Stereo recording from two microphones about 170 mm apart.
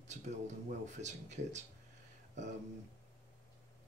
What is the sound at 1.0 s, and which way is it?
Speech, 45° right (ahead or behind).